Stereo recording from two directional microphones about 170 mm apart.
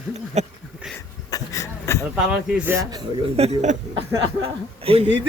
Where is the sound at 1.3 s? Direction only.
20° left (ahead or behind).